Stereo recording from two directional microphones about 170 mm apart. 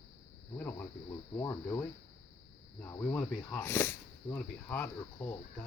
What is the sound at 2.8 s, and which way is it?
Speech, 15° left (ahead or behind).